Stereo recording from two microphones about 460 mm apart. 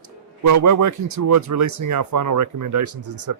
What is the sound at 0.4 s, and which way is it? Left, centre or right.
Speech, right.